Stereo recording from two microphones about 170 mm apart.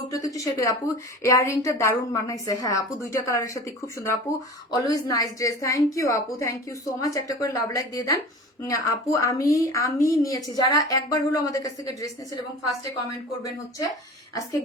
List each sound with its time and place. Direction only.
0.1 s a woman's voice: 20° left (ahead or behind)